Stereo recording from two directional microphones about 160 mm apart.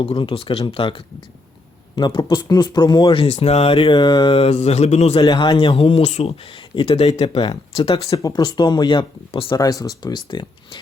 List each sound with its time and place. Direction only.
0.0 s speech: 35° left (ahead or behind)
5.2 s speech: 25° left (ahead or behind)
7.3 s speech: 25° left (ahead or behind)
7.8 s speech: 35° left (ahead or behind)
8.1 s speech: 25° left (ahead or behind)